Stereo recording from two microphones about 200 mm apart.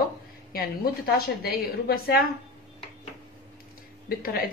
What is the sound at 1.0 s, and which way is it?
Speech, 50° left (ahead or behind).